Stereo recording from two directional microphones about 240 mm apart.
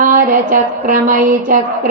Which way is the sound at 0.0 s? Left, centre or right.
Right.